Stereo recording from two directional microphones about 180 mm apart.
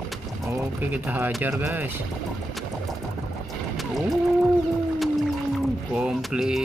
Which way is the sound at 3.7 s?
Centre (ahead or behind).